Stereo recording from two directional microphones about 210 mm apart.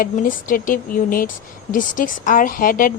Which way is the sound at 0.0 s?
40° left (ahead or behind).